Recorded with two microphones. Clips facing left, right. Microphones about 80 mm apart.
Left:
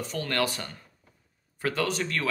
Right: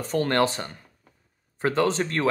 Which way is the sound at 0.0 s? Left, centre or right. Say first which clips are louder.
Right 6 dB; right.